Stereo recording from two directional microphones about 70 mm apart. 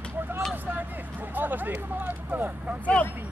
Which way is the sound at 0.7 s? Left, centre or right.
Right.